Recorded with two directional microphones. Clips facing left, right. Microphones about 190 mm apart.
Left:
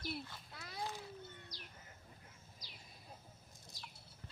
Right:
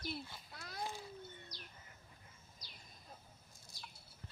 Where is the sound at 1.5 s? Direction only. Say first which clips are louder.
Even; 90° left.